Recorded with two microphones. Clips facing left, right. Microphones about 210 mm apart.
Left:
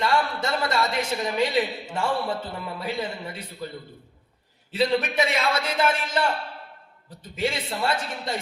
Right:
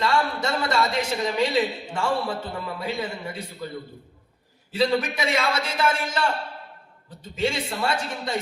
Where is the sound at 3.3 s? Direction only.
25° right (ahead or behind).